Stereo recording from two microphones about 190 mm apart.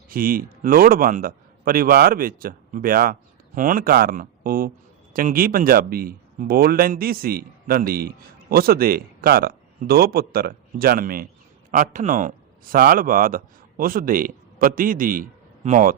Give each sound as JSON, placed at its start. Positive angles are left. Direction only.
{"t": 0.1, "sound": "a man's voice", "side_deg": -50}